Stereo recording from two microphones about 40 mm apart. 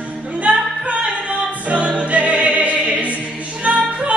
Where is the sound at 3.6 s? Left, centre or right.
Right.